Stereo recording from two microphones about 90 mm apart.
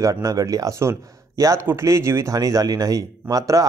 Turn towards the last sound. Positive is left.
turn(degrees=-40)  # may be behind; listen again after turning